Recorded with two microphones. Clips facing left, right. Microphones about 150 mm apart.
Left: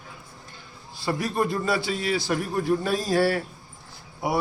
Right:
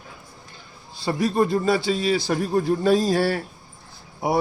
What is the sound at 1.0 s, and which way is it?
A man's voice, 25° right (ahead or behind).